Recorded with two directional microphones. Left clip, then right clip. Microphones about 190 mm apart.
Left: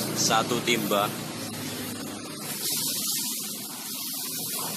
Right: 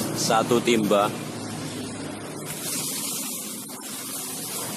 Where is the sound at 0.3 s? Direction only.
35° right (ahead or behind).